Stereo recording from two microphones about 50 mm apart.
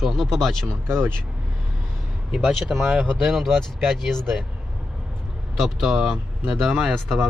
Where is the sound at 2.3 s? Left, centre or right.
Centre.